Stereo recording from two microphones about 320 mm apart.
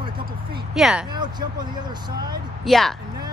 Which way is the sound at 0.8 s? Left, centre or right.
Centre.